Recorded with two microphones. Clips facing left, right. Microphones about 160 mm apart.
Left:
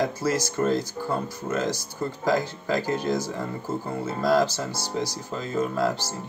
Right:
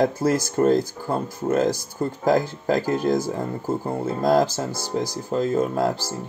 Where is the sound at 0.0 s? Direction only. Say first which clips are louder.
Right 5 dB; 50° right (ahead or behind).